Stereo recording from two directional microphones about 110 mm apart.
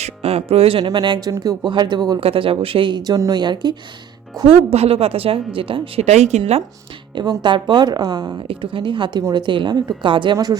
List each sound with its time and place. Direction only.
0.0 s speech: 70° right (ahead or behind)
0.9 s a woman's voice: 45° right (ahead or behind)
1.3 s a woman's voice: 35° right (ahead or behind)
2.2 s a woman's voice: 55° right (ahead or behind); by 4.5 s 35° right (ahead or behind)
4.7 s a woman's voice: 65° right (ahead or behind)
6.1 s a woman's voice: 90° right
7.2 s a woman's voice: 45° right (ahead or behind)
8.4 s a woman's voice: 50° right (ahead or behind)
10.3 s a woman's voice: 35° right (ahead or behind)